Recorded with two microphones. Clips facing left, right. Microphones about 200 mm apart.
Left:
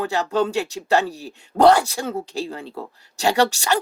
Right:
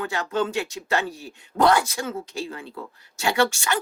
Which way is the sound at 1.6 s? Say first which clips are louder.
Left 5 dB; 30° left (ahead or behind).